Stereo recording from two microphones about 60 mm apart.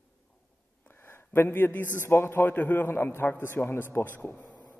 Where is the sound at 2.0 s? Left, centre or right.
Left.